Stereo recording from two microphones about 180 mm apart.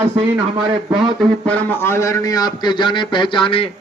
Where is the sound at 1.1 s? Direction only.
5° left (ahead or behind); by 3.7 s 30° left (ahead or behind).